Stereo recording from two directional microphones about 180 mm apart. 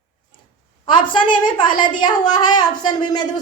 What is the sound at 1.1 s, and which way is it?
A woman's voice, 25° left (ahead or behind).